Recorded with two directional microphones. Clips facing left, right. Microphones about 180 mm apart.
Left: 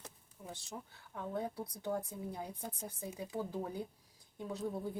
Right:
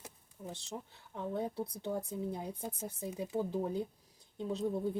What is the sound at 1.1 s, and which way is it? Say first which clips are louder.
Speech: right 3 dB; 20° right (ahead or behind).